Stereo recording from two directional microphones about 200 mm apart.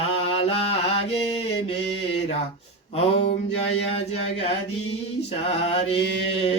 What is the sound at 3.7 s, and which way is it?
Mantra, 30° left (ahead or behind).